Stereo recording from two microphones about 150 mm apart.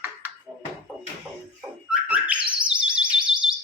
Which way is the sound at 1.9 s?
10° right (ahead or behind).